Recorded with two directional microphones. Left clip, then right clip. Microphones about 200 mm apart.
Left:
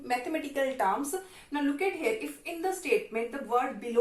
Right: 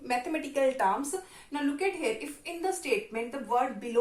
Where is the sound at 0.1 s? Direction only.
25° right (ahead or behind).